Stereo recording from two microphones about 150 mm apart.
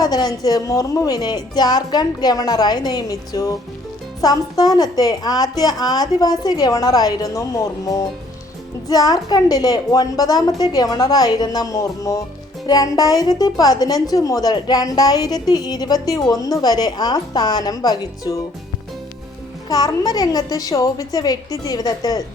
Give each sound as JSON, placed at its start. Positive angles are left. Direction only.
{"t": 0.0, "sound": "speech", "side_deg": 25}
{"t": 19.6, "sound": "speech", "side_deg": 25}